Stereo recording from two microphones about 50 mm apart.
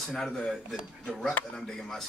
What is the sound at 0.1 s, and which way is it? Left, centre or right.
Speech, centre.